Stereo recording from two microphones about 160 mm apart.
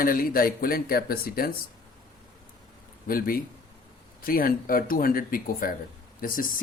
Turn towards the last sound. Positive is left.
turn(degrees=60)  # may be behind; listen again after turning